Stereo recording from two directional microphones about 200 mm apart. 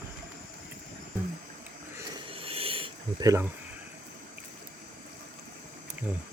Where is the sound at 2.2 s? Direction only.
30° right (ahead or behind).